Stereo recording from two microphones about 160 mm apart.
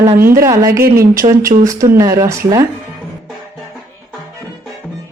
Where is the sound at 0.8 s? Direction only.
70° right (ahead or behind).